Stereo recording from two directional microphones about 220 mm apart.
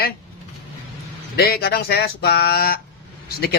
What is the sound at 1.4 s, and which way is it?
Speech, 45° left (ahead or behind).